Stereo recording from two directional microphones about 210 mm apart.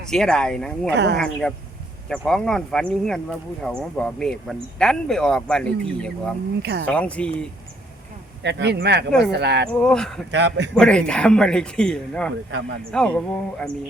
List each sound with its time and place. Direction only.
0.1 s speech: 5° left (ahead or behind)
6.6 s speech: 50° right (ahead or behind)
6.8 s speech: 5° left (ahead or behind)
8.4 s speech: 55° right (ahead or behind)
9.6 s speech: 5° left (ahead or behind)
10.3 s a man's voice: 55° right (ahead or behind)
10.8 s speech: 5° left (ahead or behind)